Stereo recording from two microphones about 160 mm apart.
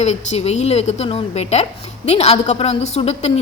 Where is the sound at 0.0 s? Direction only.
45° left (ahead or behind).